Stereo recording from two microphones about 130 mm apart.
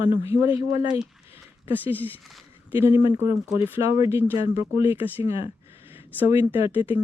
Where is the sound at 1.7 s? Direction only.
15° right (ahead or behind).